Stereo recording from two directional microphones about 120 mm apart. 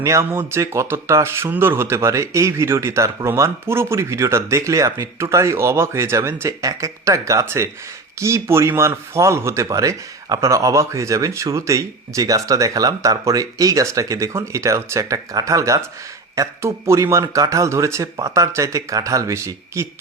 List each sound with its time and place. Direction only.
0.0 s speech: 25° right (ahead or behind)